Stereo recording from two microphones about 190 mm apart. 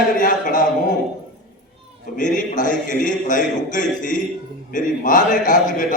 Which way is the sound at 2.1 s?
45° left (ahead or behind).